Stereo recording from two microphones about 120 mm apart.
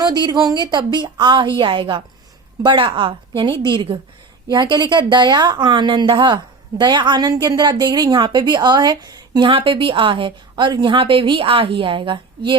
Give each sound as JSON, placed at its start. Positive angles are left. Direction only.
{"t": 0.0, "sound": "a woman's voice", "side_deg": -35}